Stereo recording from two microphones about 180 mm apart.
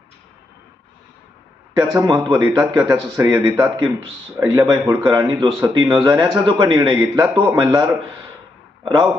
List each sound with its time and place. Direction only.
1.7 s speech: 20° right (ahead or behind)